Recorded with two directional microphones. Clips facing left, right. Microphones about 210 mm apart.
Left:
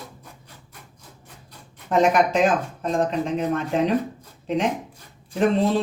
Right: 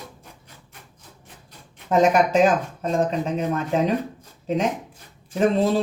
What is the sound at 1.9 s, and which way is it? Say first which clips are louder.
Speech: right 1 dB; 40° right (ahead or behind).